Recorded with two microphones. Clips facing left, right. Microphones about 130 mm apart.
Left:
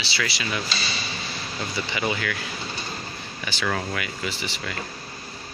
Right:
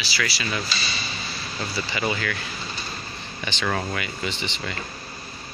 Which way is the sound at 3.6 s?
5° right (ahead or behind).